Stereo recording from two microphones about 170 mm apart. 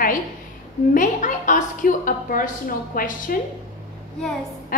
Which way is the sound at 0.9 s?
50° left (ahead or behind).